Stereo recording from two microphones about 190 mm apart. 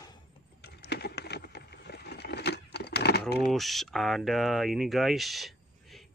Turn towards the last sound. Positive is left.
turn(degrees=0)  # may be behind; listen again after turning